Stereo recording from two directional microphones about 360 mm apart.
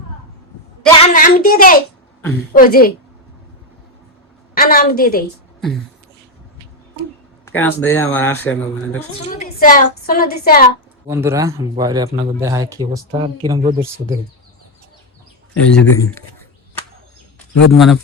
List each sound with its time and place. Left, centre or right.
0.9 s a woman's voice: centre
4.5 s a woman's voice: left
7.4 s speech: centre
9.1 s a woman's voice: centre
11.0 s a man's voice: centre
15.5 s speech: centre
17.7 s speech: centre